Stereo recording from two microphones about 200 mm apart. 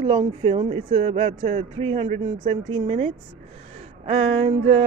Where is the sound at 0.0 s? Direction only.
25° right (ahead or behind).